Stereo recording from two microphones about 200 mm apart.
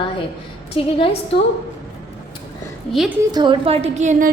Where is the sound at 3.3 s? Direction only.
25° right (ahead or behind); by 4.3 s 40° right (ahead or behind).